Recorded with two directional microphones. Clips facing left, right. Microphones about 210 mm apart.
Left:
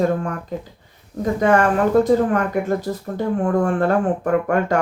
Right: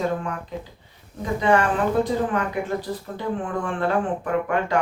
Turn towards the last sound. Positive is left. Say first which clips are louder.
# left 5 dB
turn(degrees=45)  # may be behind; listen again after turning